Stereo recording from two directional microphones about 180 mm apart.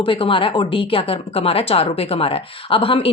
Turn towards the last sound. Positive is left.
turn(degrees=30)  # may be behind; listen again after turning